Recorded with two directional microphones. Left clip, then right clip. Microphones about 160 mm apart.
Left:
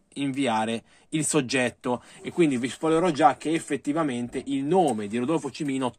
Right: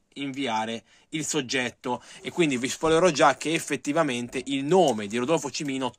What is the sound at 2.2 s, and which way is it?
Speech, 30° right (ahead or behind).